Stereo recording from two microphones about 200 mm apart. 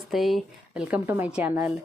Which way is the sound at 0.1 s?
Centre (ahead or behind).